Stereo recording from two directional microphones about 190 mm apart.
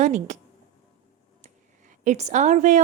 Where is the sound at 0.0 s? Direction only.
40° right (ahead or behind).